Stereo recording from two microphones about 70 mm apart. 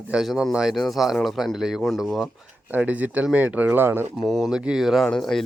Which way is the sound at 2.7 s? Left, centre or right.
Right.